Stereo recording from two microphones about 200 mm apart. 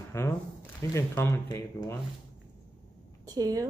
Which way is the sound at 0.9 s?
15° left (ahead or behind).